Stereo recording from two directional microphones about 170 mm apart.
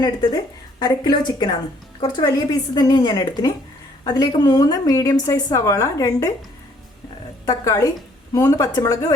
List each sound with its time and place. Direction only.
0.0 s a woman's voice: 25° left (ahead or behind)
7.4 s a woman's voice: 20° left (ahead or behind)